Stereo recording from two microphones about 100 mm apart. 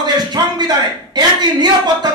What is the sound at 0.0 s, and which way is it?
A man's voice, 45° right (ahead or behind).